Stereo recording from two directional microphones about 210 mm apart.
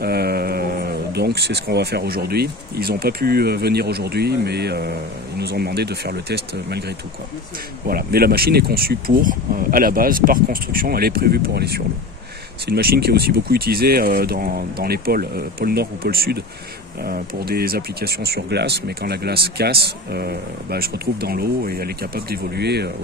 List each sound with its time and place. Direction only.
0.0 s speech: 50° right (ahead or behind)
7.8 s speech: 45° right (ahead or behind)